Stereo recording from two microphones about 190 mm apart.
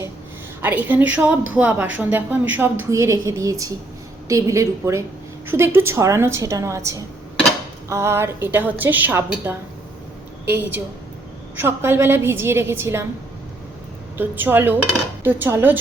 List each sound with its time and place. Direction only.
0.6 s a woman's voice: 10° right (ahead or behind)
14.2 s a woman's voice: 10° right (ahead or behind)